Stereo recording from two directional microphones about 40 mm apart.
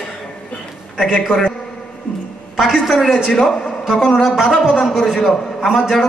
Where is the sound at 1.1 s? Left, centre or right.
Left.